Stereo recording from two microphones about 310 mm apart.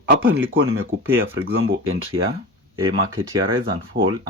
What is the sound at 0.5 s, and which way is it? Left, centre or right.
Speech, right.